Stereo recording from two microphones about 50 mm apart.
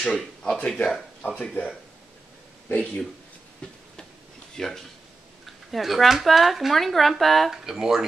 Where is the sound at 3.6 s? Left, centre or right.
Left.